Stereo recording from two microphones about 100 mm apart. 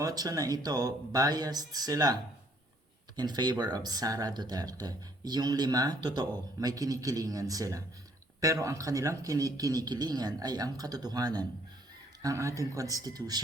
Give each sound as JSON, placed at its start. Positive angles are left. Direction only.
{"t": 0.0, "sound": "speech", "side_deg": -40}
{"t": 3.2, "sound": "speech", "side_deg": -45}
{"t": 12.2, "sound": "speech", "side_deg": -30}